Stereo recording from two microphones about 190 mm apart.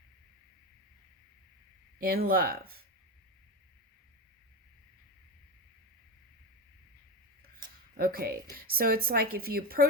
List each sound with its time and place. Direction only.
2.0 s a woman's voice: 50° right (ahead or behind)
7.9 s a woman's voice: 50° right (ahead or behind)